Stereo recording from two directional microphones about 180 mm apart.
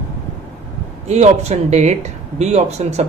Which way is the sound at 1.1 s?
35° right (ahead or behind).